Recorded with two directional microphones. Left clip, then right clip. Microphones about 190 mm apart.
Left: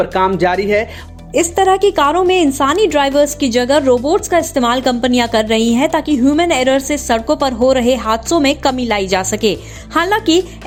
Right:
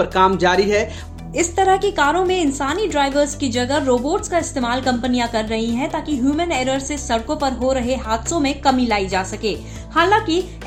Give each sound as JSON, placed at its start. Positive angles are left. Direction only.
{"t": 0.0, "sound": "speech", "side_deg": 20}
{"t": 1.3, "sound": "speech", "side_deg": 45}